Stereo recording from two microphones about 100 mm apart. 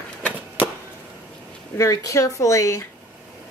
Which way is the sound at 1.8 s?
30° left (ahead or behind).